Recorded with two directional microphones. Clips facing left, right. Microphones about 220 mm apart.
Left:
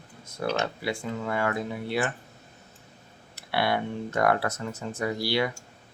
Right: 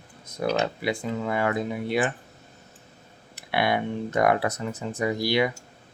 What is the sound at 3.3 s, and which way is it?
Speech, 15° right (ahead or behind).